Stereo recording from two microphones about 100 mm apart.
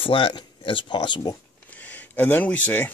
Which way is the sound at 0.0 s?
60° left (ahead or behind).